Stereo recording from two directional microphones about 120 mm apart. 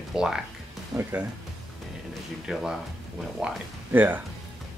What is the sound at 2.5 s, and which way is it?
Speech, 5° right (ahead or behind).